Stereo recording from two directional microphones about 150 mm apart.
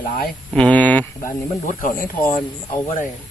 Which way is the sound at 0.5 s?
10° left (ahead or behind).